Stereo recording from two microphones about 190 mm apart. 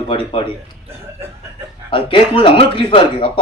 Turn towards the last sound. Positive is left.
turn(degrees=25)  # may be behind; listen again after turning